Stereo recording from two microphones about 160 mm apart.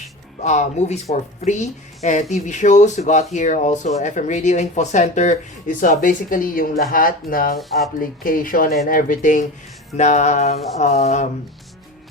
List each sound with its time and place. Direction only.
0.4 s speech: 45° left (ahead or behind)